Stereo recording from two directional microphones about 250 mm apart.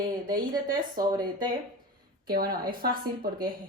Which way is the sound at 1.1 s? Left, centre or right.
Centre.